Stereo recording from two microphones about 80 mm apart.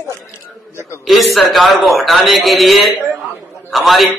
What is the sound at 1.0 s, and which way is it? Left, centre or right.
A man's voice, centre.